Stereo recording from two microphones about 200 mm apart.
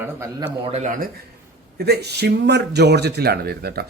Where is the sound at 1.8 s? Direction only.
55° right (ahead or behind).